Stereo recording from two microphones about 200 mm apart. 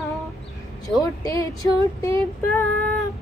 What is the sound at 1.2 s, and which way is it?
A woman's voice, 15° left (ahead or behind).